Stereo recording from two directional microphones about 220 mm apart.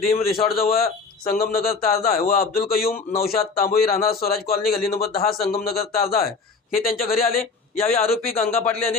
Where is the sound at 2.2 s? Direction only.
40° left (ahead or behind).